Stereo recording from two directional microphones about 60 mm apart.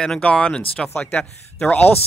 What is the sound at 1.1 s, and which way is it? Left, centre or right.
Speech, left.